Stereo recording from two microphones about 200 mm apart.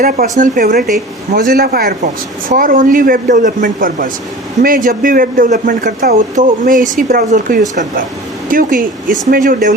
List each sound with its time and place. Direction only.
0.0 s speech: 45° right (ahead or behind)